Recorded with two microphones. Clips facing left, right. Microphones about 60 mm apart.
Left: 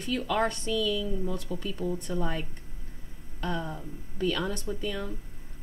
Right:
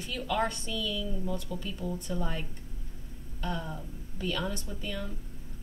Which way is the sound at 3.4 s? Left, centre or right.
Left.